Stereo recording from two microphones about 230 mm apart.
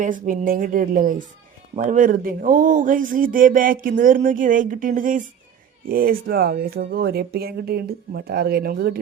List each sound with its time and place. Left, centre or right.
0.0 s speech: right